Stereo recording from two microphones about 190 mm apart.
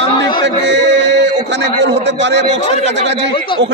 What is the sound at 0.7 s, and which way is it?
Music, 70° right (ahead or behind).